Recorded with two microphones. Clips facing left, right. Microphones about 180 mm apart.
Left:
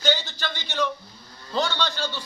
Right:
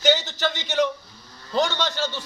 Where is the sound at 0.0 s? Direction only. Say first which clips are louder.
Right 5 dB; 20° right (ahead or behind).